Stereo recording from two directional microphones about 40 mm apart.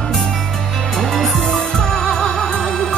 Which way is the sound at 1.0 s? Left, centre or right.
Centre.